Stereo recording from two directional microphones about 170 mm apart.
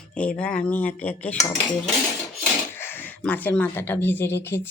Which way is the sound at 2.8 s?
10° left (ahead or behind).